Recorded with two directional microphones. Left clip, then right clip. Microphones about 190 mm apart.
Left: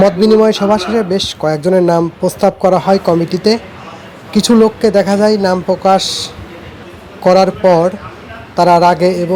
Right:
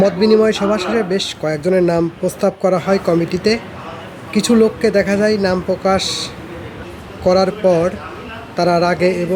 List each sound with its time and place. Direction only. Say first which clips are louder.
0.0 s speech: left 4 dB; 20° left (ahead or behind)